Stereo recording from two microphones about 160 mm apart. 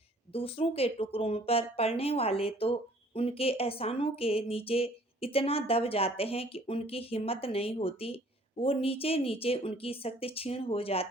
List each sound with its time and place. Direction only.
0.3 s a woman's voice: 35° left (ahead or behind)